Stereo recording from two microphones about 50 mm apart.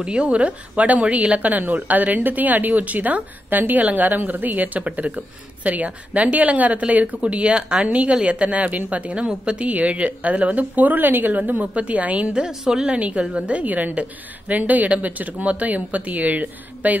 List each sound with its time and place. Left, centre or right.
0.0 s a woman's voice: right
12.3 s a woman's voice: centre; by 17.0 s right